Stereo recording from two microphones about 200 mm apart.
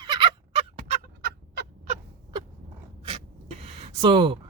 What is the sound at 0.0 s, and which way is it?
Fowl, 20° right (ahead or behind).